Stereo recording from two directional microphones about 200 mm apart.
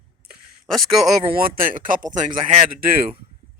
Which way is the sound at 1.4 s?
45° right (ahead or behind).